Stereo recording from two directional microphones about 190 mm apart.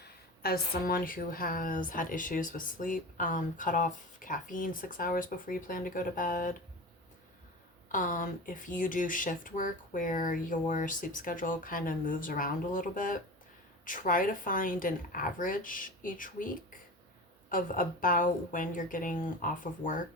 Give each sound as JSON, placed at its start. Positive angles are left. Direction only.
{"t": 0.4, "sound": "a woman's voice", "side_deg": 50}
{"t": 7.9, "sound": "a woman's voice", "side_deg": 45}